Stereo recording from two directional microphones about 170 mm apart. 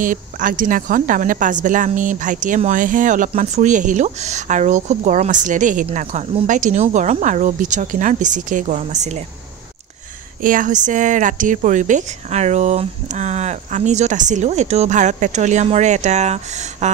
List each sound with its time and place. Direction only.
0.0 s speech: 50° right (ahead or behind)
5.9 s speech: 40° right (ahead or behind)
10.4 s speech: 50° right (ahead or behind)